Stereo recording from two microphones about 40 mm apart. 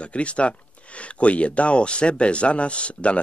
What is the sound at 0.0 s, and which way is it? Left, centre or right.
Speech, left.